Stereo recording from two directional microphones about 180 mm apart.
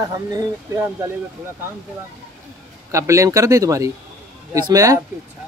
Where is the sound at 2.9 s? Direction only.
15° right (ahead or behind).